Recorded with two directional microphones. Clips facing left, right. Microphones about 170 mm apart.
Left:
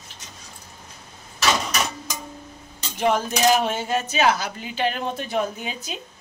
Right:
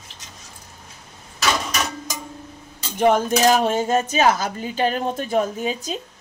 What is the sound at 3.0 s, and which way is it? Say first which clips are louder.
A woman's voice: right 4 dB; 45° right (ahead or behind).